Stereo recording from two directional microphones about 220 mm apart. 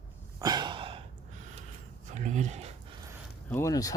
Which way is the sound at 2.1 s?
35° right (ahead or behind).